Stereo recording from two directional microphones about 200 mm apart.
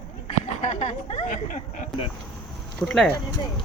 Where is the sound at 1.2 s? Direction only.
40° left (ahead or behind).